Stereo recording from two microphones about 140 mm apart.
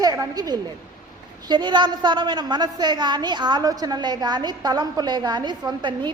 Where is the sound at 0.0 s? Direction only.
30° right (ahead or behind).